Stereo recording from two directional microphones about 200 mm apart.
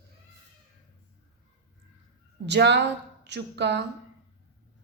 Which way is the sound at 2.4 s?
60° right (ahead or behind).